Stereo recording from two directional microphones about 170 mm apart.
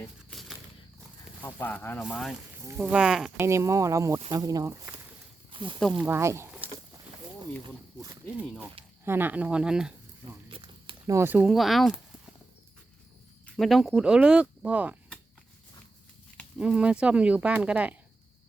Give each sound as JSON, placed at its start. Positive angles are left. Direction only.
{"t": 0.3, "sound": "a sound", "side_deg": 0}
{"t": 1.4, "sound": "speech", "side_deg": 10}
{"t": 2.0, "sound": "speech", "side_deg": 0}
{"t": 2.5, "sound": "speech", "side_deg": -10}
{"t": 3.3, "sound": "speech", "side_deg": -15}
{"t": 5.5, "sound": "snake", "side_deg": -30}
{"t": 5.8, "sound": "speech", "side_deg": 0}
{"t": 6.1, "sound": "speech", "side_deg": -15}
{"t": 9.0, "sound": "speech", "side_deg": -10}
{"t": 10.5, "sound": "a sound", "side_deg": -30}
{"t": 11.0, "sound": "speech", "side_deg": -15}
{"t": 13.6, "sound": "speech", "side_deg": 0}
{"t": 16.6, "sound": "speech", "side_deg": -5}